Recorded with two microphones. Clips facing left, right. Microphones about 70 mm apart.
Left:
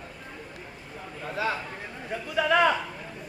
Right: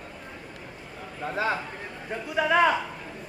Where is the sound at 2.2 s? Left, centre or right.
Centre.